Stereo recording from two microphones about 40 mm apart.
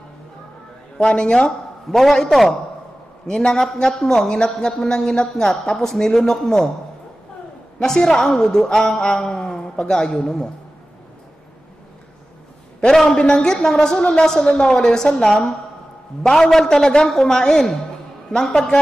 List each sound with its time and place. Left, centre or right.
0.9 s speech: left
1.9 s a man's voice: centre
3.3 s speech: centre
7.8 s a man's voice: centre
10.1 s a man's voice: centre
12.9 s a man's voice: centre
13.2 s speech: left
13.6 s speech: centre